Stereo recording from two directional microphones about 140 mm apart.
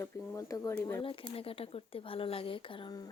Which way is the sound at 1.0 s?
40° left (ahead or behind).